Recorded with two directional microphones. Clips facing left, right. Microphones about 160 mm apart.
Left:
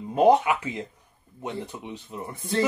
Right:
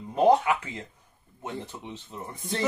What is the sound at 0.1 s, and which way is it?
Speech, 20° left (ahead or behind).